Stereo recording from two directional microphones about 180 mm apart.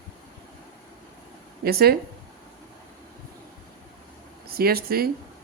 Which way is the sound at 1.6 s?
60° right (ahead or behind).